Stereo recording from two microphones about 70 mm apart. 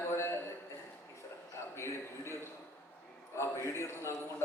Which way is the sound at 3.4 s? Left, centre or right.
Left.